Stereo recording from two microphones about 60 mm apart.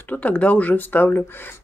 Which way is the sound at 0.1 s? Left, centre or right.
Left.